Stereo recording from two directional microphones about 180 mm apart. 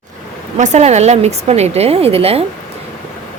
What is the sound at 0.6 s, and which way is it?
Speech, 40° right (ahead or behind).